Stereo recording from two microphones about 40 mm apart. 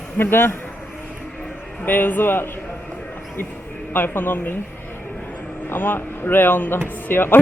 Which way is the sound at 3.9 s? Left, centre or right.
Left.